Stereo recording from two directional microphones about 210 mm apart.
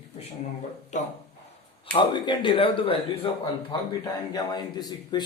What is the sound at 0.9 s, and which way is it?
Speech, 35° left (ahead or behind).